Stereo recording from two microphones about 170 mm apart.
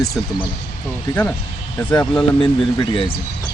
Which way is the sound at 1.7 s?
15° left (ahead or behind).